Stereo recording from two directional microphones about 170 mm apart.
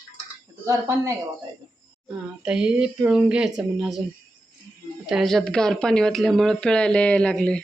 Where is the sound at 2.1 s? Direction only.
5° right (ahead or behind).